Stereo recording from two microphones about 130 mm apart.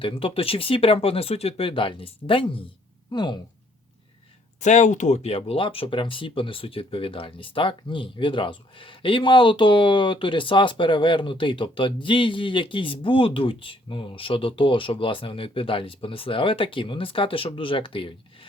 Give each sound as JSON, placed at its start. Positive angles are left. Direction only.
{"t": 0.0, "sound": "speech", "side_deg": 45}
{"t": 4.6, "sound": "speech", "side_deg": 65}